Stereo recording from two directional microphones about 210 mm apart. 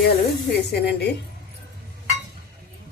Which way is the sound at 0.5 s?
50° left (ahead or behind).